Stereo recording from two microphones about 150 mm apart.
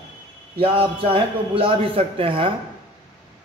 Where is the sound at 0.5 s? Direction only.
40° right (ahead or behind).